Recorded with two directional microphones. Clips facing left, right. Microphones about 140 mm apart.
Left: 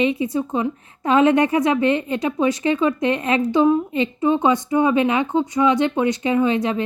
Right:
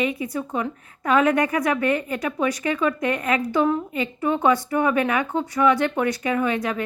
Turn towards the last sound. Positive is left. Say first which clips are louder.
# left 4 dB
turn(degrees=25)  # may be behind; listen again after turning